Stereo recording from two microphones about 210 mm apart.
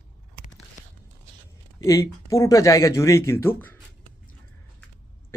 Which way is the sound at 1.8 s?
15° left (ahead or behind).